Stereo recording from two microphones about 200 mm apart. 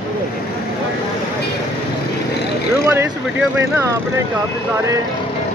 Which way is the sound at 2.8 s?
15° right (ahead or behind).